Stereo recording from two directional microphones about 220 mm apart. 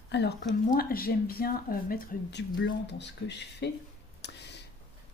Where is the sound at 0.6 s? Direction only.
40° left (ahead or behind).